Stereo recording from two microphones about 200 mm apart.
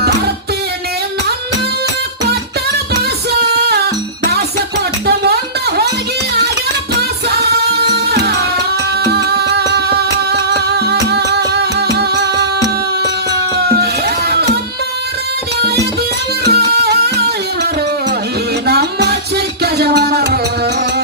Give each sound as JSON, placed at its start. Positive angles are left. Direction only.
{"t": 5.0, "sound": "music", "side_deg": -55}
{"t": 7.8, "sound": "music", "side_deg": -55}
{"t": 10.8, "sound": "music", "side_deg": -55}
{"t": 13.3, "sound": "a sound", "side_deg": -55}
{"t": 16.4, "sound": "music", "side_deg": -55}
{"t": 18.6, "sound": "music", "side_deg": -55}